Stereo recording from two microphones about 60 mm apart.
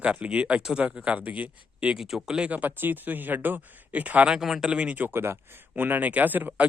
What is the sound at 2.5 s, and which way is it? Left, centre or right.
Speech, right.